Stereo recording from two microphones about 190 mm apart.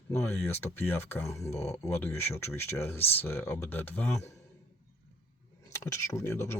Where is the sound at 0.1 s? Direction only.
10° left (ahead or behind).